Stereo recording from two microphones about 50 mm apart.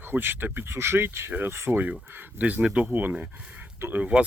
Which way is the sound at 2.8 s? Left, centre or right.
Right.